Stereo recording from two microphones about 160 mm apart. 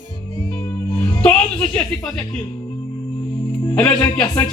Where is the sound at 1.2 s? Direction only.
5° left (ahead or behind).